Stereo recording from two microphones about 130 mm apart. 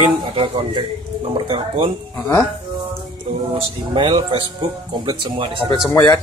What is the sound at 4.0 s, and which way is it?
Speech, 40° right (ahead or behind).